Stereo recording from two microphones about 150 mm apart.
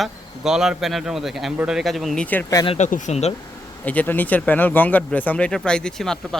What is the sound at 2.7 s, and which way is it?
Speech, 50° left (ahead or behind).